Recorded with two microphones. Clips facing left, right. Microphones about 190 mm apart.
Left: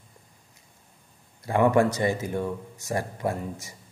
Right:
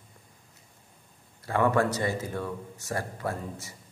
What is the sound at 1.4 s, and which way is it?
A man's voice, 15° left (ahead or behind).